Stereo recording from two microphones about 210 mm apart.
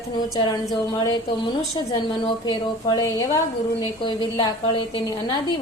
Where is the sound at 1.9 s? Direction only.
20° left (ahead or behind).